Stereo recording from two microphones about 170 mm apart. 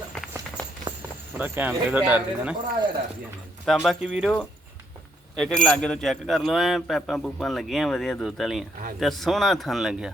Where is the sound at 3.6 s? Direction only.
Centre (ahead or behind).